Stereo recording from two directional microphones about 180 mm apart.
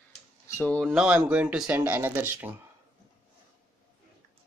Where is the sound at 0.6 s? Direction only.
5° left (ahead or behind).